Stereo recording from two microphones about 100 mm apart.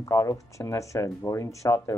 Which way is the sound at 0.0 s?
30° left (ahead or behind).